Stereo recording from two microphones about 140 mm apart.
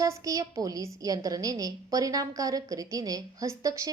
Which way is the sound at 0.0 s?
25° right (ahead or behind).